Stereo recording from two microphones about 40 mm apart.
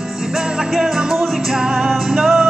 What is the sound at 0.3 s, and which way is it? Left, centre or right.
Music, centre.